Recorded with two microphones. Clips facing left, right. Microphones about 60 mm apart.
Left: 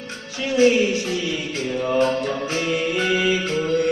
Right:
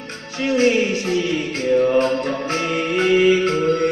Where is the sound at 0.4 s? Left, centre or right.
Right.